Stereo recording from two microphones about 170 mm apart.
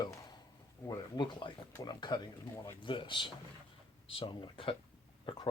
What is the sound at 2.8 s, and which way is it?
Speech, 30° left (ahead or behind).